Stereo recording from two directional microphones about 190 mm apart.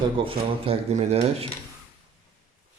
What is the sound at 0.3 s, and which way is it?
Speech, 30° right (ahead or behind).